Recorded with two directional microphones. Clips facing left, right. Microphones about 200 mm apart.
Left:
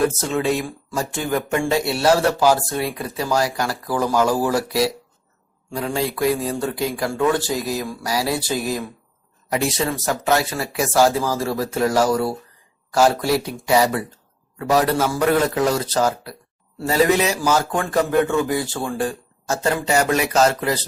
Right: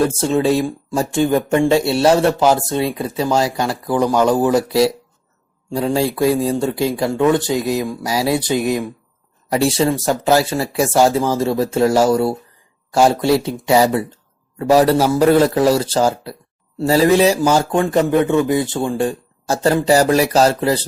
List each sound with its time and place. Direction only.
0.2 s speech: 30° right (ahead or behind)
9.5 s speech: 30° right (ahead or behind)